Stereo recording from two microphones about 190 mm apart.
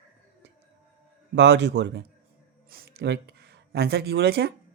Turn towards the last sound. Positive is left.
turn(degrees=-60)  # may be behind; listen again after turning